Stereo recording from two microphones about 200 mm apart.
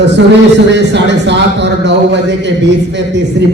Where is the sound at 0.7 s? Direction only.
60° right (ahead or behind).